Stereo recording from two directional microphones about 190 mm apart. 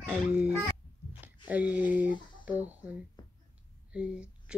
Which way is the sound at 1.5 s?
5° right (ahead or behind).